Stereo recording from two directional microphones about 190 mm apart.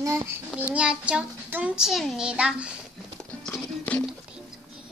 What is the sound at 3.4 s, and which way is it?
Music, 10° left (ahead or behind).